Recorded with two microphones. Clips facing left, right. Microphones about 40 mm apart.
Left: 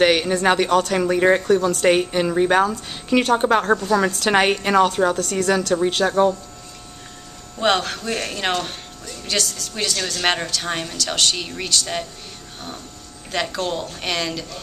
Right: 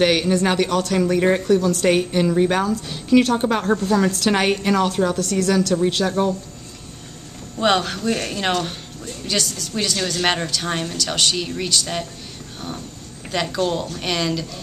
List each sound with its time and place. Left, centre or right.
0.0 s a woman's voice: centre
5.1 s a woman's voice: centre
7.5 s a woman's voice: centre
13.3 s a woman's voice: centre